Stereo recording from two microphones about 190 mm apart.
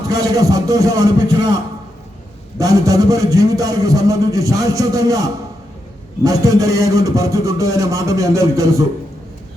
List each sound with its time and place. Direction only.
0.1 s speech: 20° right (ahead or behind)
2.6 s a man's voice: 20° right (ahead or behind)